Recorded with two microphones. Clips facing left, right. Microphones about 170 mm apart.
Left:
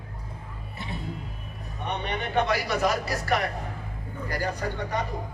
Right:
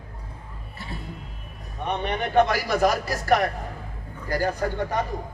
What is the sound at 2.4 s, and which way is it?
A man's voice, 45° right (ahead or behind).